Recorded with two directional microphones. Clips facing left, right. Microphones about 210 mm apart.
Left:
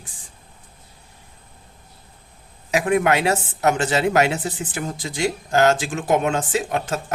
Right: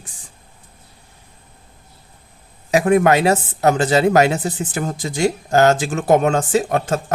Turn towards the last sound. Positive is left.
turn(degrees=-40)  # may be behind; listen again after turning